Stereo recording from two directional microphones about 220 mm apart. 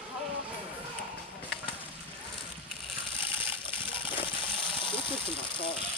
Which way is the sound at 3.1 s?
25° left (ahead or behind).